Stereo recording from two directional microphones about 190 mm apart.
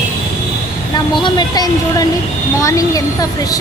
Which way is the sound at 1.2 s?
20° left (ahead or behind).